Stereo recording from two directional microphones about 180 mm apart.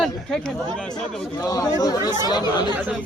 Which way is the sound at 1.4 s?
20° left (ahead or behind).